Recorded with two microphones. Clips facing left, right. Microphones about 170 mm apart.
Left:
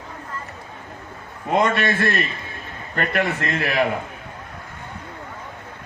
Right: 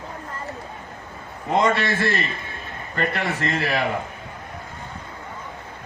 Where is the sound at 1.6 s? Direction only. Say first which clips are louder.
Even; 55° left (ahead or behind).